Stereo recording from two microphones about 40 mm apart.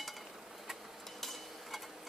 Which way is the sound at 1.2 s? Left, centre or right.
Centre.